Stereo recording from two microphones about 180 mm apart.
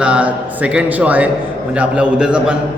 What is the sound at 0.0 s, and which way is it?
A man's voice, 5° right (ahead or behind).